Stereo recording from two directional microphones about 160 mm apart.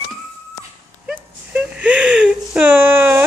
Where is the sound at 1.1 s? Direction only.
5° right (ahead or behind).